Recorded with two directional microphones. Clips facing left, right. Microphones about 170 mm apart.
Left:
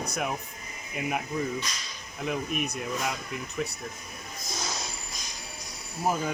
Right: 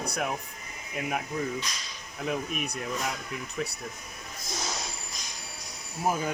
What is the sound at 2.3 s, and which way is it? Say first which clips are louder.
Speech: left 1 dB; centre (ahead or behind).